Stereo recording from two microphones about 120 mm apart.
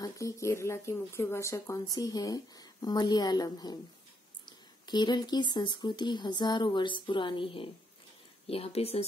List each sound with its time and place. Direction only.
0.0 s speech: 25° left (ahead or behind); by 9.0 s 55° left (ahead or behind)